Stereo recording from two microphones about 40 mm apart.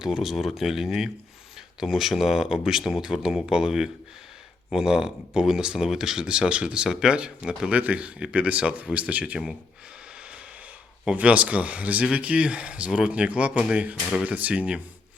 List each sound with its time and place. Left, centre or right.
0.0 s speech: centre
6.2 s speech: right
7.7 s speech: right
7.9 s speech: right
11.1 s speech: right